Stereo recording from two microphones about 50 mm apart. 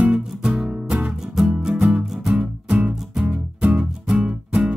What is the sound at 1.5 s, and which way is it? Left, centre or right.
Music, right.